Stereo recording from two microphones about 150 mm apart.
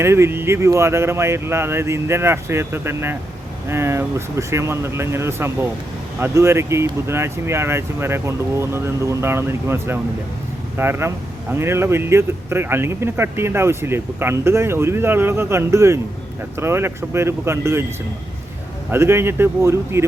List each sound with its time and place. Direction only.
0.0 s speech: 15° right (ahead or behind)
18.9 s speech: 15° right (ahead or behind)